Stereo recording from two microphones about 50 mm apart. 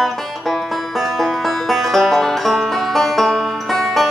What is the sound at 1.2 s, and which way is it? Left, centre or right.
Music, centre.